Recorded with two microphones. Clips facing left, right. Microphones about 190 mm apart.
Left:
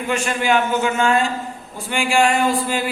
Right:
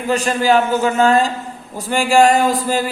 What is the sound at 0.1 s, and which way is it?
Speech, 35° right (ahead or behind).